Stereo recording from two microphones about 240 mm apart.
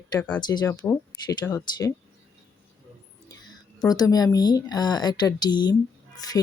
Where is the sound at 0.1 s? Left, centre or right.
Centre.